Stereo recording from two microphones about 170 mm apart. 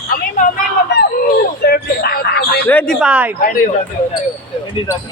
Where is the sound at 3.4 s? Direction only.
55° left (ahead or behind).